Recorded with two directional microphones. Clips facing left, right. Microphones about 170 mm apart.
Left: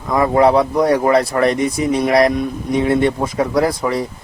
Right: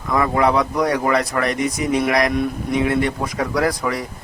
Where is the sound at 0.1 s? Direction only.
30° left (ahead or behind).